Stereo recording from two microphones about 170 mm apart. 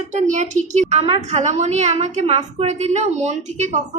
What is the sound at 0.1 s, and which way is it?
A woman's voice, 45° right (ahead or behind).